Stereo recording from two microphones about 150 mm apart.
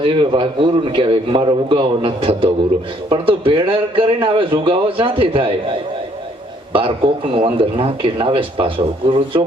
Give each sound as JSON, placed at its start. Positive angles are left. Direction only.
{"t": 0.0, "sound": "a man's voice", "side_deg": -35}
{"t": 7.3, "sound": "a man's voice", "side_deg": -35}